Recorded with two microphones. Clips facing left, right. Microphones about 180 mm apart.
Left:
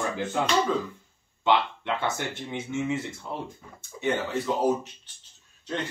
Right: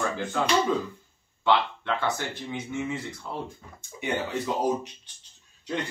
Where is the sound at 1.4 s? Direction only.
20° left (ahead or behind).